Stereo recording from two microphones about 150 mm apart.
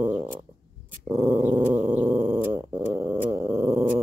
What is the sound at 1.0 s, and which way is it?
Dog, 15° right (ahead or behind).